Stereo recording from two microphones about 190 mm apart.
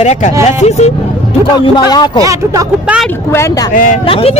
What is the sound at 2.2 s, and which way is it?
Speech, 15° right (ahead or behind).